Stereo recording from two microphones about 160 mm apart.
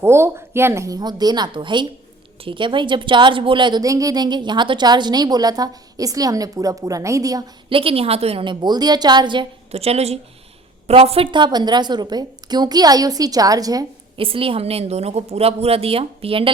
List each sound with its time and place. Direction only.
0.0 s a woman's voice: 15° right (ahead or behind)
7.7 s a woman's voice: 35° right (ahead or behind)
14.2 s a woman's voice: 35° right (ahead or behind)